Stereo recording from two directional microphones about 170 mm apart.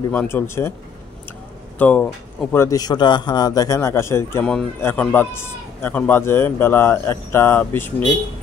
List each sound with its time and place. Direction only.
0.1 s a man's voice: 10° left (ahead or behind)
1.8 s a man's voice: 10° left (ahead or behind)